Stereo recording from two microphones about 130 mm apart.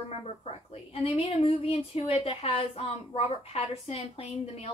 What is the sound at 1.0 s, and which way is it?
A woman's voice, 50° left (ahead or behind).